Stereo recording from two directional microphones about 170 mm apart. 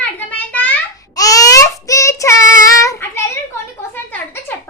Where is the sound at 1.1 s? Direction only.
20° left (ahead or behind).